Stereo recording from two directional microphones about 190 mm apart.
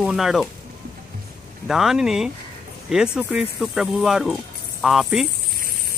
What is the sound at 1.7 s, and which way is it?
Speech, centre (ahead or behind).